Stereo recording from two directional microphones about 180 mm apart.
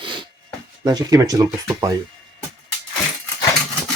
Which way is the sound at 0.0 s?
25° right (ahead or behind).